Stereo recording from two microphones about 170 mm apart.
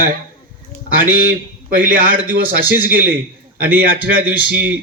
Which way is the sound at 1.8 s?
55° right (ahead or behind).